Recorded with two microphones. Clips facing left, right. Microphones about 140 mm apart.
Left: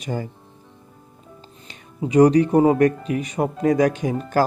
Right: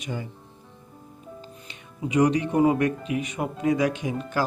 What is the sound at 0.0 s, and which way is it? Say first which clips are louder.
Speech: left 6 dB; 40° left (ahead or behind).